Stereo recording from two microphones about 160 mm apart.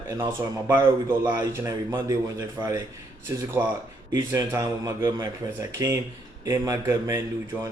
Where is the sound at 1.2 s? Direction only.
15° right (ahead or behind).